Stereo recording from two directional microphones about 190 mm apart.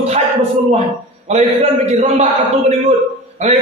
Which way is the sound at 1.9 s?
35° right (ahead or behind).